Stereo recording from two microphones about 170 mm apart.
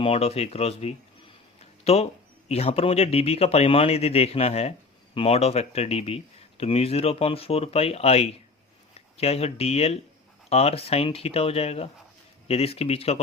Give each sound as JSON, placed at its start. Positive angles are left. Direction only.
{"t": 0.0, "sound": "speech", "side_deg": 35}